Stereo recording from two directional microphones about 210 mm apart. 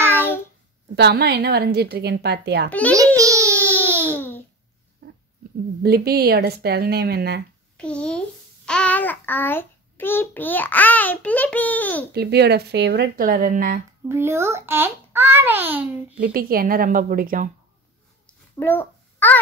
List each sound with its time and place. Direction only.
0.1 s a sound: 10° left (ahead or behind)
0.9 s a woman's voice: 50° right (ahead or behind)
2.7 s a child's voice: 5° left (ahead or behind)
3.2 s a sound: 15° right (ahead or behind)
3.9 s babbling: 10° right (ahead or behind)
5.8 s a woman's voice: 50° right (ahead or behind)
7.7 s a child's voice: 5° left (ahead or behind)
12.1 s a woman's voice: 50° right (ahead or behind)
14.0 s a child's voice: 10° right (ahead or behind)
16.2 s a woman's voice: 45° right (ahead or behind)
18.2 s babbling: 10° left (ahead or behind)